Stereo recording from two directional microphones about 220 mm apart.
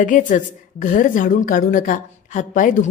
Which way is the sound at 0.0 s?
35° left (ahead or behind).